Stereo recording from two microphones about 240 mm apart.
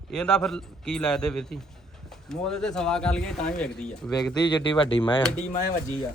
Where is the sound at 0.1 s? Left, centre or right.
Centre.